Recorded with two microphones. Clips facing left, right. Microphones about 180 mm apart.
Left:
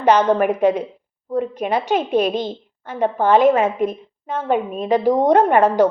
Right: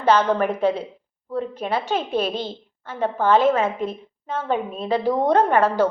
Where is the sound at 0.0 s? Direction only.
15° left (ahead or behind).